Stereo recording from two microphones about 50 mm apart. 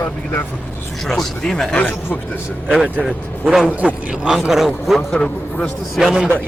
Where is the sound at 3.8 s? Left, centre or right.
Right.